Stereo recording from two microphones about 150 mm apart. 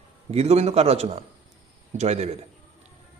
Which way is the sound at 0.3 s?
45° right (ahead or behind).